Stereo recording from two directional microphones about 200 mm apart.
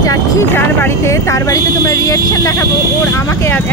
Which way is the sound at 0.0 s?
15° left (ahead or behind).